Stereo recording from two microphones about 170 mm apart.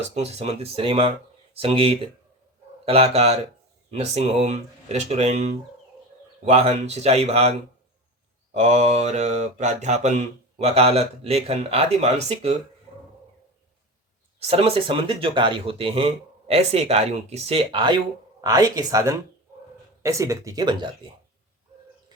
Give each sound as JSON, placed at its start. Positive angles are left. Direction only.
{"t": 0.1, "sound": "speech", "side_deg": -40}
{"t": 8.5, "sound": "speech", "side_deg": -40}
{"t": 14.3, "sound": "speech", "side_deg": -35}